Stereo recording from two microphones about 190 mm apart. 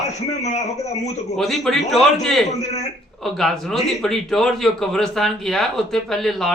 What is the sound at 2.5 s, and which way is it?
Speech, 35° left (ahead or behind).